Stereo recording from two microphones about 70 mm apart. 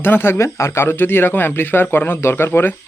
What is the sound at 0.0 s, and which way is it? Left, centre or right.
A man's voice, left.